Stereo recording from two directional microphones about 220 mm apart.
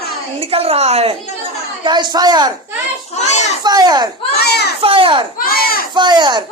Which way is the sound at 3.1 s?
30° left (ahead or behind).